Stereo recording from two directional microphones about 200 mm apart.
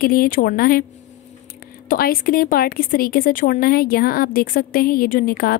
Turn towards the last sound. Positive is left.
turn(degrees=45)  # may be behind; listen again after turning